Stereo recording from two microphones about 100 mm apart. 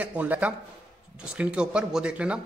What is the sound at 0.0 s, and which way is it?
Speech, 15° right (ahead or behind).